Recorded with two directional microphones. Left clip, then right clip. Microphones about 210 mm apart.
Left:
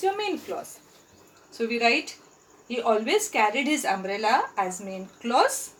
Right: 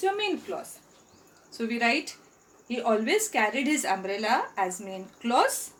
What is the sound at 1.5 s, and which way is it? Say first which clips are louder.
A woman's voice: left 3 dB; 25° right (ahead or behind).